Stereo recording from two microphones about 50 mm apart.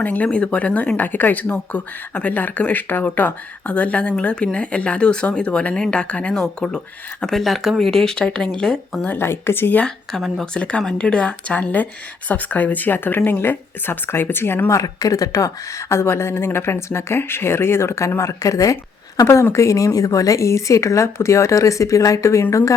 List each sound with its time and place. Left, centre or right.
0.0 s speech: left
0.3 s speech: left
6.7 s speech: centre
7.3 s speech: centre
9.0 s speech: left
10.2 s speech: centre
10.4 s speech: centre; by 14.7 s left
15.9 s a woman's voice: left
18.2 s speech: left
19.2 s speech: left
19.5 s speech: left